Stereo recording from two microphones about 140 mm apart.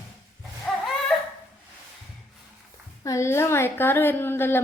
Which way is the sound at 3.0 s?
20° left (ahead or behind).